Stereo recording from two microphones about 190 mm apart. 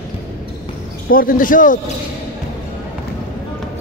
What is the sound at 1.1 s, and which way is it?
Speech, 45° left (ahead or behind).